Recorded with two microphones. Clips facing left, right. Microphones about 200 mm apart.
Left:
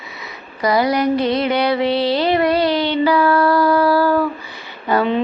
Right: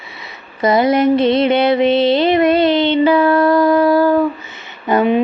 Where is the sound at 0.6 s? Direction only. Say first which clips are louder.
Right 4 dB; 25° right (ahead or behind).